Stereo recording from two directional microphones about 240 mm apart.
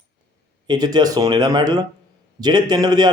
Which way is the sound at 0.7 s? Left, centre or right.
Centre.